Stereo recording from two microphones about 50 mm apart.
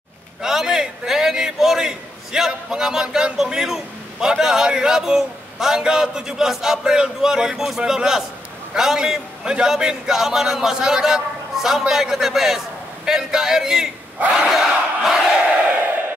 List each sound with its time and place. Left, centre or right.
0.4 s a man's voice: centre
14.5 s crowd: centre
15.4 s crowd: centre